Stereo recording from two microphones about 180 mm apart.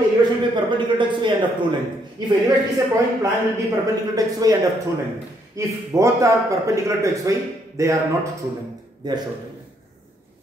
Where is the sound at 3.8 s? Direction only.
20° right (ahead or behind).